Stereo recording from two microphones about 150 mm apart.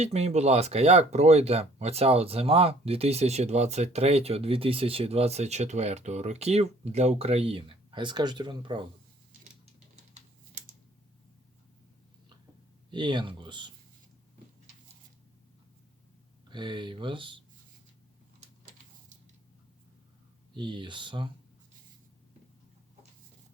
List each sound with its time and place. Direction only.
0.0 s speech: 45° right (ahead or behind)
9.9 s a sound: 50° right (ahead or behind)
12.9 s speech: 30° right (ahead or behind)
16.5 s speech: 30° right (ahead or behind)
20.5 s speech: 35° right (ahead or behind)